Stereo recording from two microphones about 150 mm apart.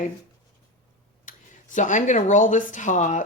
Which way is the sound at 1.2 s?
60° left (ahead or behind).